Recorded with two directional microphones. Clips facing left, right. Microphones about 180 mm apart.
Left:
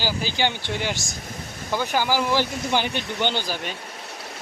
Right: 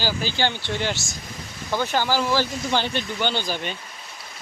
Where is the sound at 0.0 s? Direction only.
15° left (ahead or behind).